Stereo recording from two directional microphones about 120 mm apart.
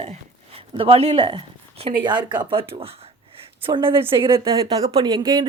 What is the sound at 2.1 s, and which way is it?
Speech, 40° right (ahead or behind).